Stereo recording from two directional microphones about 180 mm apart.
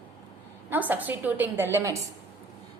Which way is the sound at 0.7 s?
10° right (ahead or behind).